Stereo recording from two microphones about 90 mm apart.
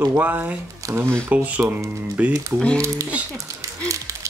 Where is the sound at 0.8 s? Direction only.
40° right (ahead or behind).